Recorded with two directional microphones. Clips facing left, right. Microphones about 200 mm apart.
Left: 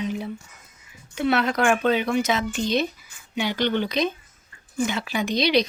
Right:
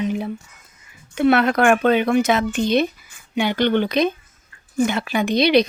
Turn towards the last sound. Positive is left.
turn(degrees=-55)  # may be behind; listen again after turning